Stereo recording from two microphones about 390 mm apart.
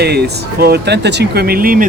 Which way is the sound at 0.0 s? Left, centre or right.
Right.